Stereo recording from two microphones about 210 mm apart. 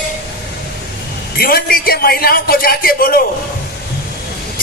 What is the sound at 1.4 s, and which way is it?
Music, 45° left (ahead or behind).